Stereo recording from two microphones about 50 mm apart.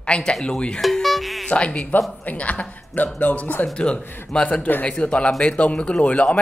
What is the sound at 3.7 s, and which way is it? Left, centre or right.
Speech, left.